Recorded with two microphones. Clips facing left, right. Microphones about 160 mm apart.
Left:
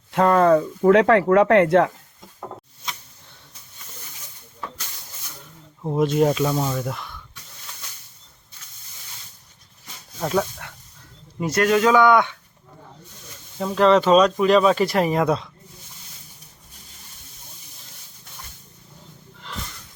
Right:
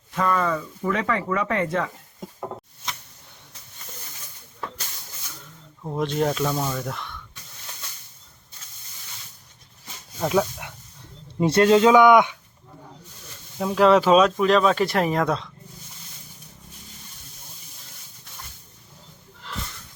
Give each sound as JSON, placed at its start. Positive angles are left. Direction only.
{"t": 0.1, "sound": "speech", "side_deg": 65}
{"t": 5.8, "sound": "speech", "side_deg": 15}
{"t": 10.2, "sound": "speech", "side_deg": -5}
{"t": 11.3, "sound": "speech", "side_deg": -30}
{"t": 13.6, "sound": "speech", "side_deg": -5}